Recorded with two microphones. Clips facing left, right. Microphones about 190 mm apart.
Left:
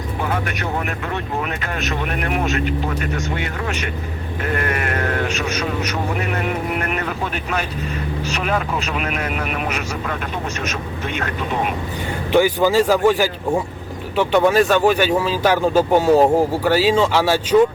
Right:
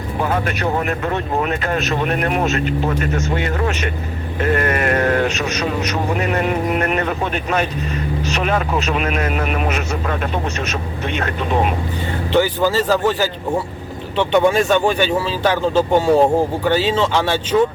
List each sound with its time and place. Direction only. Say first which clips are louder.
1.5 s speech: right 6 dB; 40° right (ahead or behind)
12.3 s speech: left 1 dB; 15° left (ahead or behind)